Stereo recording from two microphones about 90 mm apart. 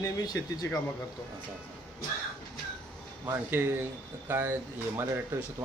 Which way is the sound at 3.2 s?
25° right (ahead or behind).